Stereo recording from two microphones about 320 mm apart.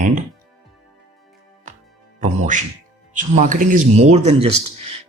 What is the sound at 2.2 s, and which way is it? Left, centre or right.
Speech, right.